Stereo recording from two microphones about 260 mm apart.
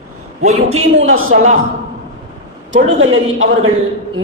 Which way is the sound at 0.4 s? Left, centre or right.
Right.